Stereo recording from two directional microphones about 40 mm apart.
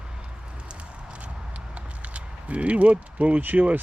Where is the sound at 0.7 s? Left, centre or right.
Right.